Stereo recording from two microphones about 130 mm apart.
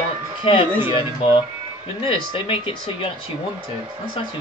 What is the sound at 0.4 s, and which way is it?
Speech, 45° left (ahead or behind).